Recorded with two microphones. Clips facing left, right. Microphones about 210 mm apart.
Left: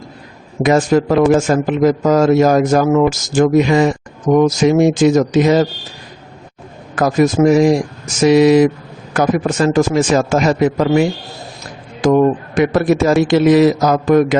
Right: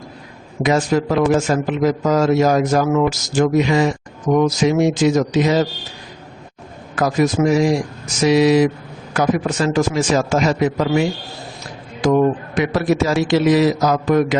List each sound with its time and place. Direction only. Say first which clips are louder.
0.6 s a man's voice: left 4 dB; 50° left (ahead or behind)
6.9 s a man's voice: left 4 dB; 50° left (ahead or behind)
12.0 s a man's voice: left 3 dB; 50° left (ahead or behind)